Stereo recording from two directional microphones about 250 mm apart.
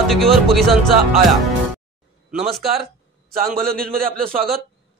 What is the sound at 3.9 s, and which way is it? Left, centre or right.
Music, right.